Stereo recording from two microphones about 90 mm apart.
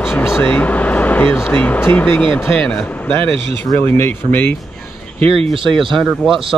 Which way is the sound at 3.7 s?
25° left (ahead or behind).